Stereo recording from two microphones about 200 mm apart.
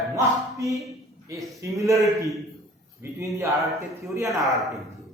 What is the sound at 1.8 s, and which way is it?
A man's voice, 15° right (ahead or behind).